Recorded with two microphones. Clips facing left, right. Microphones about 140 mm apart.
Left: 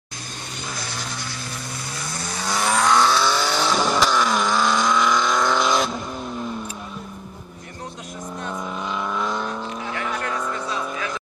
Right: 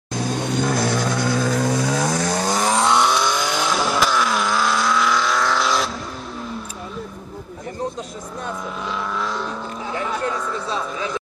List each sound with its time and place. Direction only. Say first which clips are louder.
0.2 s vehicle: right 14 dB; 60° right (ahead or behind)
1.5 s vehicle: right 14 dB; 90° right
2.3 s vehicle: right 4 dB; 45° right (ahead or behind)
2.7 s vehicle: left 1 dB; 25° right (ahead or behind); by 5.9 s centre (ahead or behind)
9.1 s vehicle: even; centre (ahead or behind)